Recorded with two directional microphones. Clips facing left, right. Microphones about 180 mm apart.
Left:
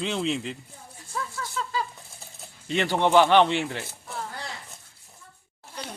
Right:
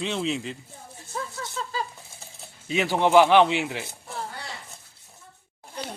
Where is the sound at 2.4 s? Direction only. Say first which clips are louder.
Right 1 dB; 5° right (ahead or behind).